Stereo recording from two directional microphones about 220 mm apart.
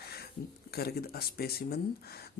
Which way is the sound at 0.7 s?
45° left (ahead or behind).